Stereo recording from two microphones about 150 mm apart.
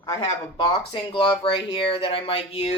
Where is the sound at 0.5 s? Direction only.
30° left (ahead or behind).